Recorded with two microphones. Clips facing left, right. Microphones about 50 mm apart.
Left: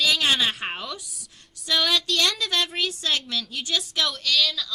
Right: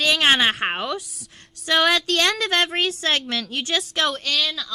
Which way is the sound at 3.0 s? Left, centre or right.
Right.